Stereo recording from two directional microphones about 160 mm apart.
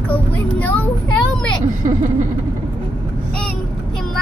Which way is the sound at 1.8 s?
50° right (ahead or behind).